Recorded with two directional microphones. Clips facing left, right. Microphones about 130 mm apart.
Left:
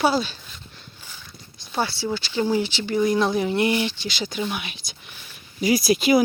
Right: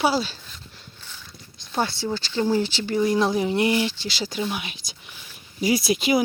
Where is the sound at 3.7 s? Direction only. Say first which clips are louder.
Right 1 dB; 25° left (ahead or behind).